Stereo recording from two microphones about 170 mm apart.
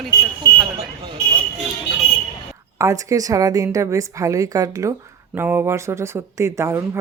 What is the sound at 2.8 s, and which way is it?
A woman's voice, 20° right (ahead or behind).